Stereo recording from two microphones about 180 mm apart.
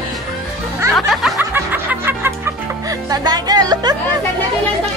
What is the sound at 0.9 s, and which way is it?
Music, centre (ahead or behind).